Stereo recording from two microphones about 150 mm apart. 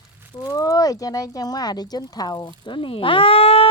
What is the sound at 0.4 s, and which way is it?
A woman's voice, 25° left (ahead or behind).